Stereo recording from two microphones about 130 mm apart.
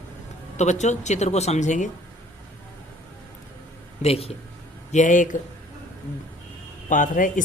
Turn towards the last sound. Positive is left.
turn(degrees=90)